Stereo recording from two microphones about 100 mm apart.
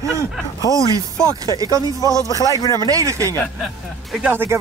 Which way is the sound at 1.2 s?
35° right (ahead or behind).